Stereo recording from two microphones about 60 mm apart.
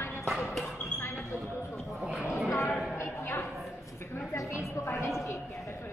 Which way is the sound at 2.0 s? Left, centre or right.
Centre.